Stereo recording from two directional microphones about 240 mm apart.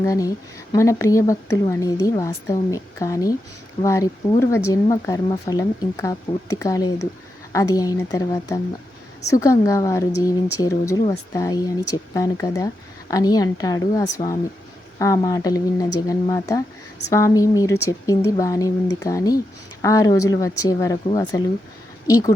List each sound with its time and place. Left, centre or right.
0.0 s speech: centre